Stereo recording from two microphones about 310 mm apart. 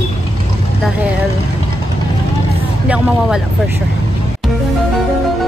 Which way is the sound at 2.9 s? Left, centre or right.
Centre.